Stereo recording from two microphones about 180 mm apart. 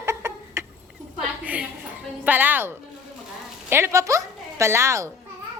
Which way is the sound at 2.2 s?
10° right (ahead or behind).